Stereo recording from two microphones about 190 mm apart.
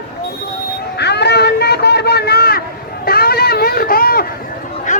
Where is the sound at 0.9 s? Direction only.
60° left (ahead or behind).